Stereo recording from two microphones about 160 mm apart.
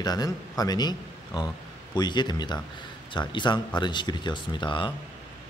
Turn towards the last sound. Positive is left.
turn(degrees=30)  # may be behind; listen again after turning